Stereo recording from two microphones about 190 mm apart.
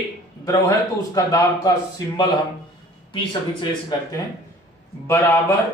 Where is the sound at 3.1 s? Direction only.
25° left (ahead or behind).